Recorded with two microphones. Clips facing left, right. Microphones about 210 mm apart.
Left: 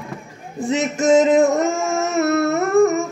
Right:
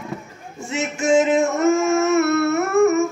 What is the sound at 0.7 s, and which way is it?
Male singing, 40° left (ahead or behind).